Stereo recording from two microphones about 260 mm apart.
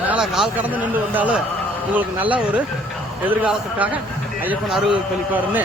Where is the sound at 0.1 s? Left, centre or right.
Centre.